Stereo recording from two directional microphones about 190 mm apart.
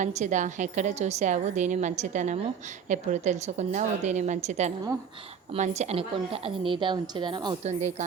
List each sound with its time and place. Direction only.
0.0 s a woman's voice: 40° right (ahead or behind); by 7.7 s 25° right (ahead or behind)
7.7 s a woman's voice: 35° right (ahead or behind)